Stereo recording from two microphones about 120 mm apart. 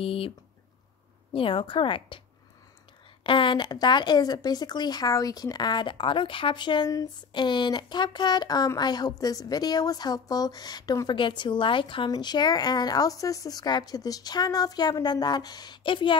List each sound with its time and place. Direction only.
0.0 s a woman's voice: 50° left (ahead or behind)
1.3 s a woman's voice: 50° left (ahead or behind)
3.3 s a woman's voice: 45° left (ahead or behind)